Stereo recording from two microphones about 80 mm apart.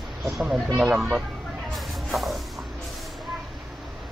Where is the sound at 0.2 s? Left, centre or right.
Centre.